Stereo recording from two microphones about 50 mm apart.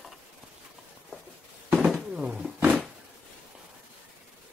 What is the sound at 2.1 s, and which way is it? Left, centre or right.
Roaring cats, right.